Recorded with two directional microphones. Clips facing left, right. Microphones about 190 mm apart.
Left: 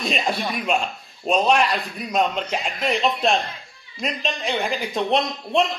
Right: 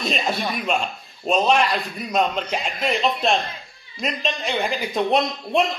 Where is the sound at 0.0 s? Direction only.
Centre (ahead or behind).